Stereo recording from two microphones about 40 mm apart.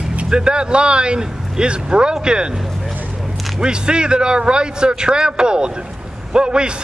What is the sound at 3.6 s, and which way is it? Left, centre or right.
Speech, right.